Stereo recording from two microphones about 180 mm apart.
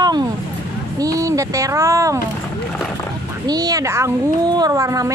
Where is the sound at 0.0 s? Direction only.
25° right (ahead or behind).